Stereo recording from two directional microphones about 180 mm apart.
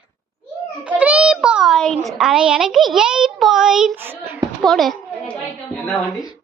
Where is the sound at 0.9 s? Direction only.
5° right (ahead or behind).